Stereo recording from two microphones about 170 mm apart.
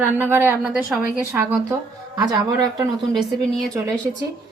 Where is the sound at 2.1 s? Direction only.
20° right (ahead or behind).